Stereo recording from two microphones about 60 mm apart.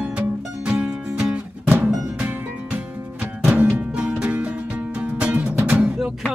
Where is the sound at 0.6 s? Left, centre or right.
Centre.